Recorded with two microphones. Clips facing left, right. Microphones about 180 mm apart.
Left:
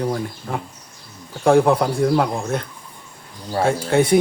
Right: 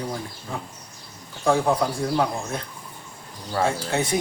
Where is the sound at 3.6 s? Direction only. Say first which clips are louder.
Left 7 dB; 60° left (ahead or behind).